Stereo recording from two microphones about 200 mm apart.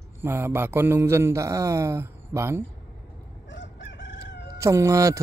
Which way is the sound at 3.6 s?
65° left (ahead or behind).